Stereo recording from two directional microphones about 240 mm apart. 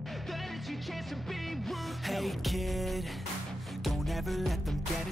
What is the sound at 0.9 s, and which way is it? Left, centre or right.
Music, centre.